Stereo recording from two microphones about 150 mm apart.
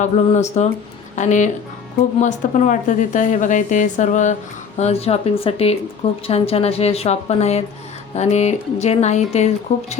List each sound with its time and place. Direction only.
0.0 s a woman's voice: 50° left (ahead or behind)
4.8 s speech: 45° left (ahead or behind)